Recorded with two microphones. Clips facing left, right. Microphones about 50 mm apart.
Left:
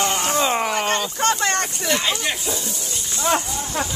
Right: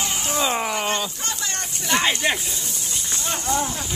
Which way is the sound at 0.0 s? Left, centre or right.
Left.